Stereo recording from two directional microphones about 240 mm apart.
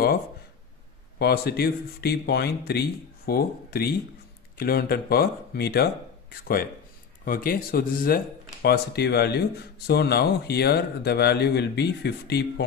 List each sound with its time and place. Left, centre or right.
1.1 s speech: left